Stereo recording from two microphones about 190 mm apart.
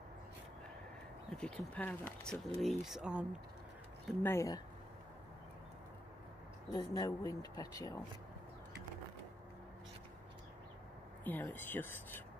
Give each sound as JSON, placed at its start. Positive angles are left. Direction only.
{"t": 1.3, "sound": "speech", "side_deg": 5}
{"t": 4.2, "sound": "speech", "side_deg": 15}
{"t": 6.7, "sound": "speech", "side_deg": 20}
{"t": 11.2, "sound": "speech", "side_deg": 10}